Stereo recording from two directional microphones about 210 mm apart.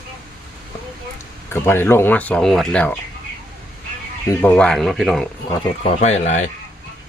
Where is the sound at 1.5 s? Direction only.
10° left (ahead or behind).